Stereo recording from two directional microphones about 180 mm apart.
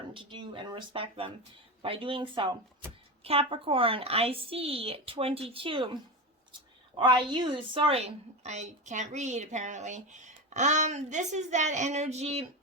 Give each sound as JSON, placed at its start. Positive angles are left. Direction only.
{"t": 0.1, "sound": "a woman's voice", "side_deg": -30}
{"t": 7.0, "sound": "a woman's voice", "side_deg": -25}